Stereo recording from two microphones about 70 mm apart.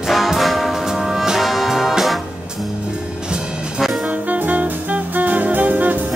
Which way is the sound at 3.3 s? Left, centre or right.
Centre.